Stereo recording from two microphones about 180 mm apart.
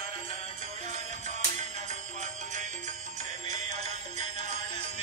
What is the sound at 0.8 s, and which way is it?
Music, 40° right (ahead or behind).